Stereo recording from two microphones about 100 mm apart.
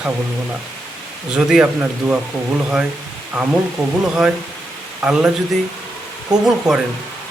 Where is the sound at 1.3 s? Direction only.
10° right (ahead or behind).